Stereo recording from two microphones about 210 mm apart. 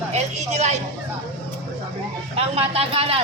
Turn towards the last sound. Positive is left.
turn(degrees=-25)  # may be behind; listen again after turning